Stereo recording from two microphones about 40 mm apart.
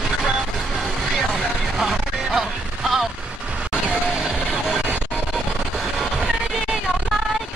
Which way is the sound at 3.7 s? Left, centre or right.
Right.